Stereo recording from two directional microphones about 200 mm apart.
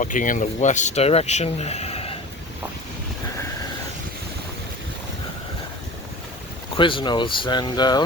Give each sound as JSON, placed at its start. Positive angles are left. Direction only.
{"t": 0.0, "sound": "speech", "side_deg": 40}
{"t": 6.7, "sound": "speech", "side_deg": 25}